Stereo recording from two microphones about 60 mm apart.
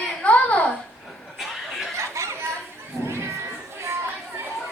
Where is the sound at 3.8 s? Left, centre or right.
Right.